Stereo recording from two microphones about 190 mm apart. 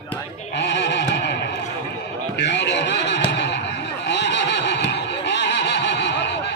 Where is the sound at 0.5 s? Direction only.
65° left (ahead or behind).